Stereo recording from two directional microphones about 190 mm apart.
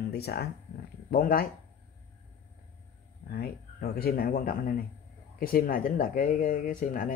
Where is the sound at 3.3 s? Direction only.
50° left (ahead or behind).